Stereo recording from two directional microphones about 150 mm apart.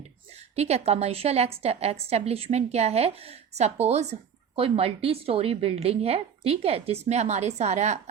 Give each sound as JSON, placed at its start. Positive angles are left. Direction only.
{"t": 0.5, "sound": "a woman's voice", "side_deg": -45}